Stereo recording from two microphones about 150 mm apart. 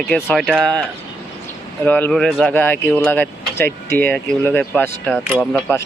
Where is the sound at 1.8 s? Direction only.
10° left (ahead or behind).